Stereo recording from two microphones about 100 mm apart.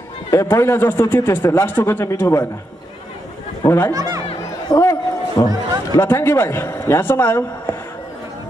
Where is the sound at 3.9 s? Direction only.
35° right (ahead or behind).